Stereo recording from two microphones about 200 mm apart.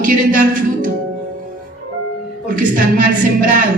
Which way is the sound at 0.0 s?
45° right (ahead or behind).